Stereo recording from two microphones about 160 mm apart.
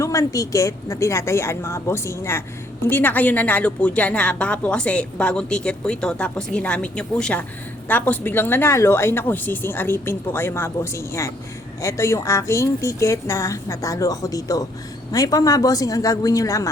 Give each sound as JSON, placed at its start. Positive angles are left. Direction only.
{"t": 0.0, "sound": "a woman's voice", "side_deg": 20}